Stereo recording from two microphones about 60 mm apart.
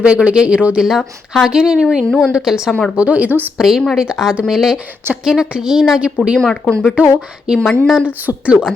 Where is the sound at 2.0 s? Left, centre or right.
Centre.